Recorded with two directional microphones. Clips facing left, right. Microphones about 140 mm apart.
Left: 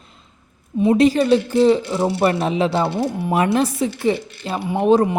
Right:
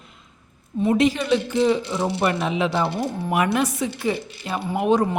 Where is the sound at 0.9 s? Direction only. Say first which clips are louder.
Left 5 dB; 35° left (ahead or behind).